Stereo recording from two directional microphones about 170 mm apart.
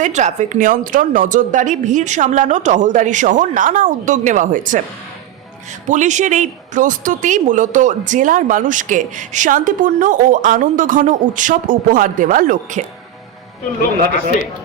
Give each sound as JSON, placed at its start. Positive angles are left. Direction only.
{"t": 0.0, "sound": "a woman's voice", "side_deg": -45}
{"t": 5.9, "sound": "a woman's voice", "side_deg": -45}